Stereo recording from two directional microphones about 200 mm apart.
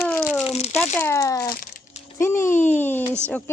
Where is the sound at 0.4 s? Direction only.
30° left (ahead or behind).